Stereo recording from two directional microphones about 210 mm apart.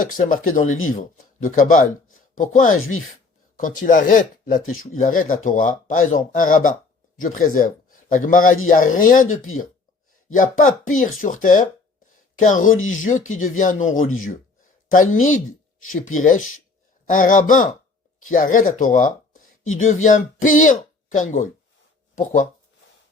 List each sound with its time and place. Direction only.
0.0 s speech: 40° left (ahead or behind)
2.0 s a sound: 80° left
2.4 s speech: 35° left (ahead or behind)
10.7 s speech: 35° left (ahead or behind)